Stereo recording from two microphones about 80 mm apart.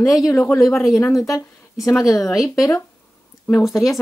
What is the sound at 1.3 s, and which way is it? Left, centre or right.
Speech, left.